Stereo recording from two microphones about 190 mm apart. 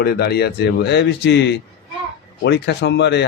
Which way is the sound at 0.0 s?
55° left (ahead or behind).